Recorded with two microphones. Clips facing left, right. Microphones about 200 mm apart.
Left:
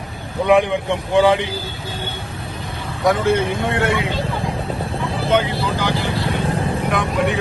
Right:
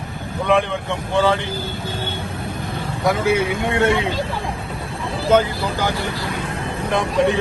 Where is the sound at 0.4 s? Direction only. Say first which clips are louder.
Left 4 dB; 15° left (ahead or behind).